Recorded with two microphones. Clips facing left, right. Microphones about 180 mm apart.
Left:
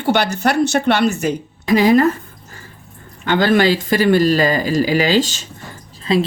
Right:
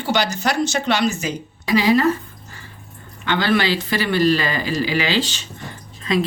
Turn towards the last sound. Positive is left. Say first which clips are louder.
# left 4 dB
turn(degrees=30)  # may be behind; listen again after turning